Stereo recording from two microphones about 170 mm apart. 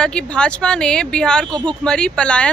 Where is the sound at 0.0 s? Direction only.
5° left (ahead or behind).